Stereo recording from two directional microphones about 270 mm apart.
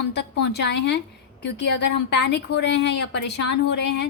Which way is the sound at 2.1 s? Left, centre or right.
Left.